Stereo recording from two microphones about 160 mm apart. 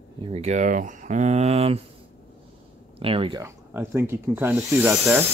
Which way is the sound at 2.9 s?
35° right (ahead or behind).